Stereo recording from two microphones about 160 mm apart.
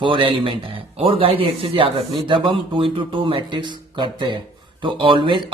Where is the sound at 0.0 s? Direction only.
30° right (ahead or behind).